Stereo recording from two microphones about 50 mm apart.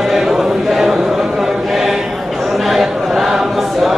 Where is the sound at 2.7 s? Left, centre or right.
Centre.